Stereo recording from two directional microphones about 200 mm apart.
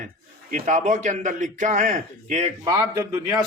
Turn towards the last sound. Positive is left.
turn(degrees=-20)  # may be behind; listen again after turning